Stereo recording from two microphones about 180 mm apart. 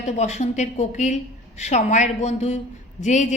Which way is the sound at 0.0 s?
40° left (ahead or behind).